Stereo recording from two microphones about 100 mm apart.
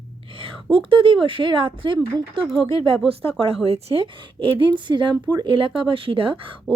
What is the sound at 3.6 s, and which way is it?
Speech, 80° right.